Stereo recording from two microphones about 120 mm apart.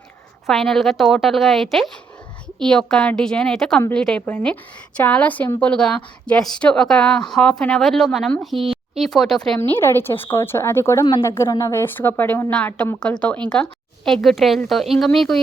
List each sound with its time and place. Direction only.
0.4 s a woman's voice: centre (ahead or behind)
9.6 s a woman's voice: 20° left (ahead or behind); by 15.4 s centre (ahead or behind)